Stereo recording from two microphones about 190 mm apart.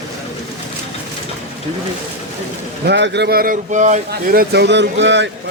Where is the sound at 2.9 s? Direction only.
65° right (ahead or behind).